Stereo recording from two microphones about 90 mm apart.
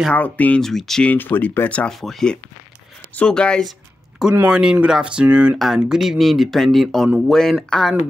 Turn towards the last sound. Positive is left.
turn(degrees=5)  # may be behind; listen again after turning